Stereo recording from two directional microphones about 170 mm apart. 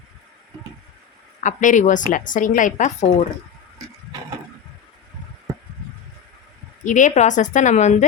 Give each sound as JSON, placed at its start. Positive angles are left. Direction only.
{"t": 1.5, "sound": "a woman's voice", "side_deg": 45}
{"t": 6.8, "sound": "a woman's voice", "side_deg": 45}